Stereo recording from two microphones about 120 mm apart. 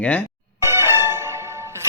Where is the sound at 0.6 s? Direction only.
20° right (ahead or behind).